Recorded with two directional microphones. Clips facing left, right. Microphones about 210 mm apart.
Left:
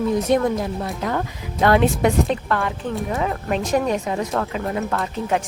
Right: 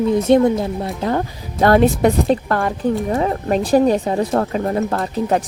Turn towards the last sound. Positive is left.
turn(degrees=-35)  # may be behind; listen again after turning